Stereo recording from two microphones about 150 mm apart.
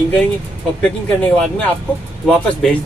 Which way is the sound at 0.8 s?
10° left (ahead or behind).